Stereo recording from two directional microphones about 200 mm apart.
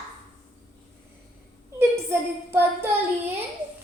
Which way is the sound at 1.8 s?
10° right (ahead or behind).